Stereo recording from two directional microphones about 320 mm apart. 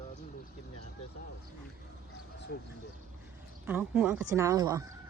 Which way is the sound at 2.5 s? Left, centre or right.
Left.